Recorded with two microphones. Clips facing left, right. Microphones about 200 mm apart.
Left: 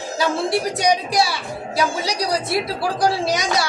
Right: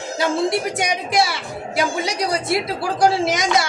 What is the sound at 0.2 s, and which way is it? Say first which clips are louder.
A woman's voice: right 1 dB; 20° right (ahead or behind).